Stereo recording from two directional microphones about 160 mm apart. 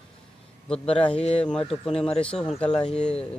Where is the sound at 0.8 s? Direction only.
35° left (ahead or behind).